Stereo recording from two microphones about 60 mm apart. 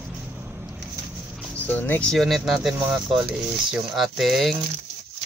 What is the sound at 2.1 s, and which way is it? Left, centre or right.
Speech, centre.